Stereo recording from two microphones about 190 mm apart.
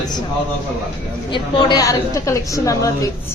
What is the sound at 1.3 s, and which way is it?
A woman's voice, 20° left (ahead or behind).